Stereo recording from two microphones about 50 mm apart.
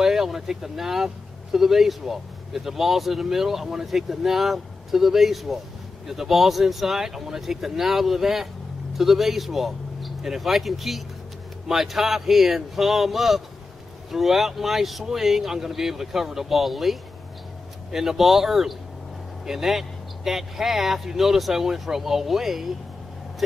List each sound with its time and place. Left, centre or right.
0.0 s speech: centre